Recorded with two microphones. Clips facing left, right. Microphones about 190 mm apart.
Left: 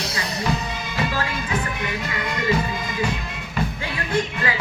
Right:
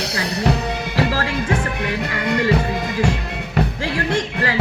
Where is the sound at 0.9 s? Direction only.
55° right (ahead or behind).